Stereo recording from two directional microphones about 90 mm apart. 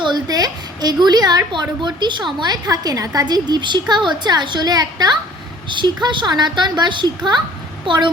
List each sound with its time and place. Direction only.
0.0 s a woman's voice: 50° right (ahead or behind)
1.8 s a woman's voice: 60° right (ahead or behind)
5.6 s a woman's voice: 60° right (ahead or behind)